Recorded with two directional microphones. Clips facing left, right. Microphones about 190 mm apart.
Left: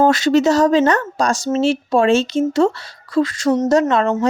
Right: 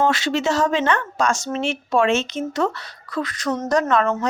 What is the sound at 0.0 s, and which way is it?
Speech, 40° left (ahead or behind).